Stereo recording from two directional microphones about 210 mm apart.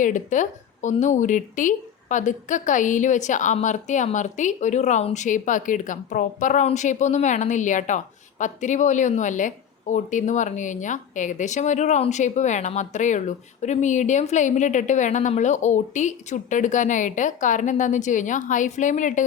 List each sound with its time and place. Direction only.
0.0 s a woman's voice: 35° left (ahead or behind)